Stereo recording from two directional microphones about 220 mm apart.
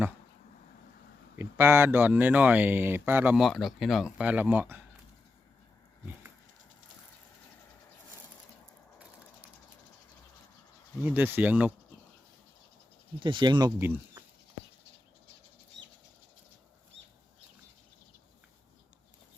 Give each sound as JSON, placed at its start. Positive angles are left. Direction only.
{"t": 1.4, "sound": "speech", "side_deg": -10}
{"t": 11.0, "sound": "speech", "side_deg": -10}
{"t": 13.1, "sound": "speech", "side_deg": -20}